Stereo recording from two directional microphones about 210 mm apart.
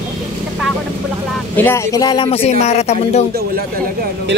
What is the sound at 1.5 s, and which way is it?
Speech, 10° left (ahead or behind).